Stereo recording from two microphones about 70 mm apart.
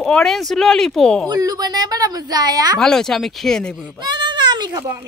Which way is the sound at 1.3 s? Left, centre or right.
Right.